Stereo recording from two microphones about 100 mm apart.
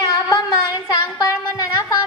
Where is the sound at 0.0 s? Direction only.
40° left (ahead or behind).